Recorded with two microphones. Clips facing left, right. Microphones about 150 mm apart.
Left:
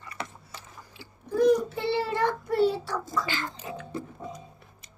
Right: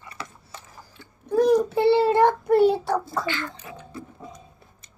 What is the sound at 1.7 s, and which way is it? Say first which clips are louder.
Child singing: right 10 dB; 65° right (ahead or behind).